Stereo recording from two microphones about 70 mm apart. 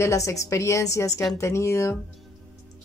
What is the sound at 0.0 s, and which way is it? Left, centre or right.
Speech, left.